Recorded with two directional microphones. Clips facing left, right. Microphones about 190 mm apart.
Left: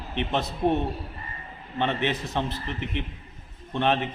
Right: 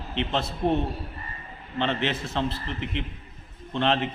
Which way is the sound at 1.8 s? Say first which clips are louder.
Left 1 dB; 15° left (ahead or behind).